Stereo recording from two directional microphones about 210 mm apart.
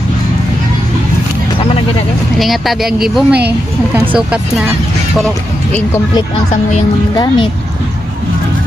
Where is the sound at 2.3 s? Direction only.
Centre (ahead or behind).